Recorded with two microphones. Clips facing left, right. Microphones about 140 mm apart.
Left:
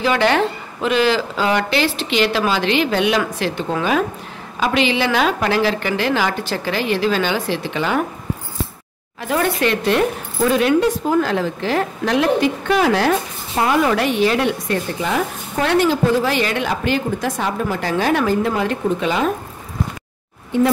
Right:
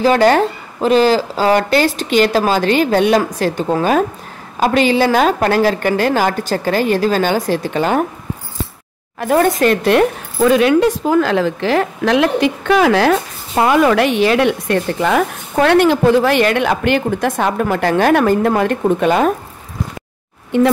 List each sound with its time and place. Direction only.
0.0 s a woman's voice: 40° right (ahead or behind)
9.2 s a woman's voice: 45° right (ahead or behind)
9.8 s a woman's voice: 75° right (ahead or behind); by 19.3 s 50° right (ahead or behind)